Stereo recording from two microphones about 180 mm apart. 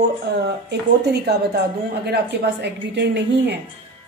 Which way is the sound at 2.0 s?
65° right (ahead or behind).